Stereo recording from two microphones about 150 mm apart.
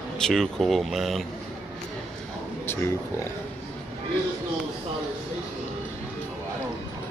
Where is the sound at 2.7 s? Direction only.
15° left (ahead or behind).